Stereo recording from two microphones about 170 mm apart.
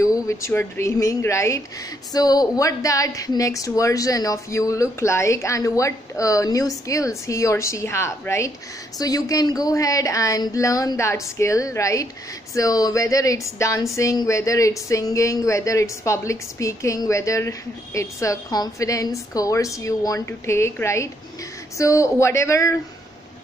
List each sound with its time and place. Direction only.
0.0 s speech: 20° left (ahead or behind)